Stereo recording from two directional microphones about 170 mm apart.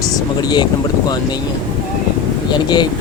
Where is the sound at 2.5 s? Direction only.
25° left (ahead or behind).